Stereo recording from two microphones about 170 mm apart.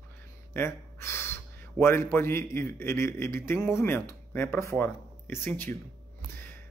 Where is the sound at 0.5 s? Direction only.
15° left (ahead or behind).